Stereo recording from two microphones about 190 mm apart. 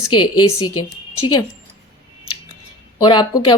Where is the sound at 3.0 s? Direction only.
25° left (ahead or behind).